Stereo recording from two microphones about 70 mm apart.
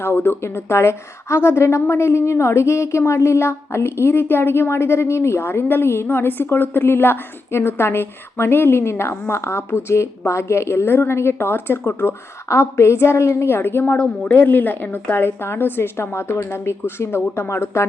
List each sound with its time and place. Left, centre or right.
0.0 s a woman's voice: left
13.9 s a woman's voice: left